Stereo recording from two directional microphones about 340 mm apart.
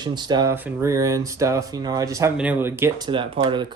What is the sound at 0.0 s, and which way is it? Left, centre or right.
Speech, centre.